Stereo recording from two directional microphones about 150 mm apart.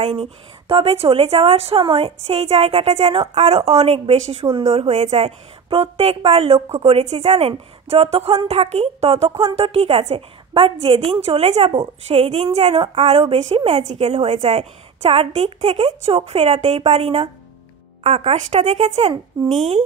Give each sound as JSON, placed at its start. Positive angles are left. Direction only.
{"t": 0.0, "sound": "a woman's voice", "side_deg": -40}